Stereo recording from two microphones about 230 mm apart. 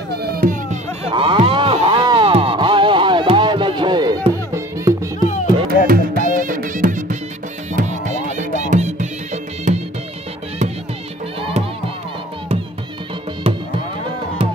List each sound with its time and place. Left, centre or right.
0.1 s music: right
1.1 s music: right
5.7 s music: right